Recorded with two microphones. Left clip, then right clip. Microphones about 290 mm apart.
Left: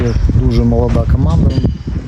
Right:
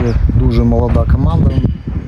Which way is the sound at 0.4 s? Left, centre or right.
Centre.